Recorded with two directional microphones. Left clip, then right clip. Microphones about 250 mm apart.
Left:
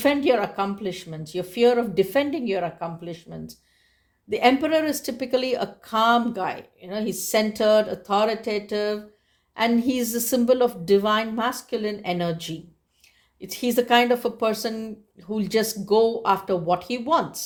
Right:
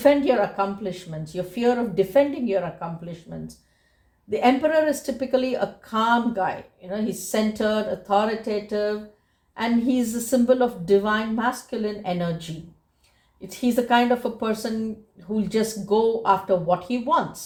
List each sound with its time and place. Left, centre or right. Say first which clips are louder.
0.0 s speech: right 2 dB; left